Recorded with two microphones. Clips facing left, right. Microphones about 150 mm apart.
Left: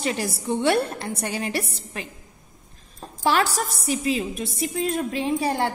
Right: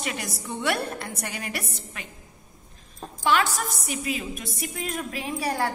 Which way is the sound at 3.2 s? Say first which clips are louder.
Left 2 dB; 35° left (ahead or behind).